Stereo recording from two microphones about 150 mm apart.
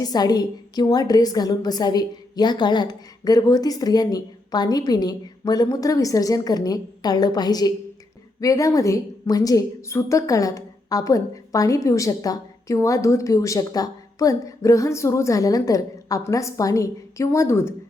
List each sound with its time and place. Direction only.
0.0 s a woman's voice: 25° left (ahead or behind)